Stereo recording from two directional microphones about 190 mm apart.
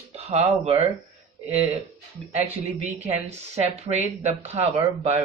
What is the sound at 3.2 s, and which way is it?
Speech, 35° right (ahead or behind).